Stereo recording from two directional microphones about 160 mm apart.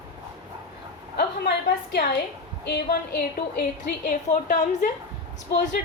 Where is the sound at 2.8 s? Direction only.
90° left.